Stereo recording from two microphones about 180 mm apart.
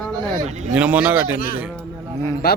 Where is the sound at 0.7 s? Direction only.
5° right (ahead or behind).